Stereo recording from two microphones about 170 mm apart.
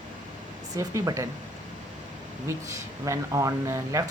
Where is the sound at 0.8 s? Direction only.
20° right (ahead or behind).